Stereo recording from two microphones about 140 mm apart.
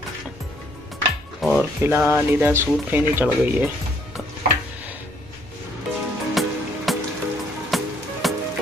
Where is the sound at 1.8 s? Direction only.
15° right (ahead or behind).